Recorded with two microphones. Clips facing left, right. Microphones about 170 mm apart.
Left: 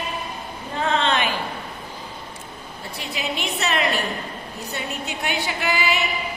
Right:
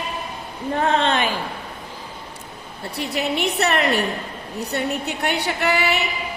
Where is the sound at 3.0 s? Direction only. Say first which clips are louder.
Right 6 dB; 65° right (ahead or behind).